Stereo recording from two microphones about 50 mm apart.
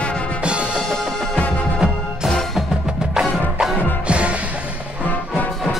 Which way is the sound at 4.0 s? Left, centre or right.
Right.